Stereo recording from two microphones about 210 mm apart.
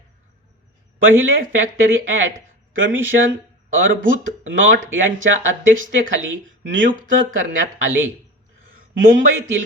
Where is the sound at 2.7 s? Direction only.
70° right (ahead or behind).